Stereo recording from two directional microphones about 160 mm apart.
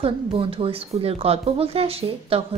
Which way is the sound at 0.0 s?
35° right (ahead or behind).